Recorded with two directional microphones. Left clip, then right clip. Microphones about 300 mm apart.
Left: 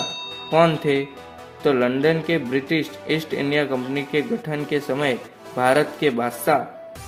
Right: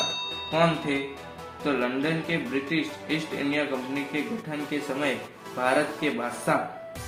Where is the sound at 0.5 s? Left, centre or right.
Left.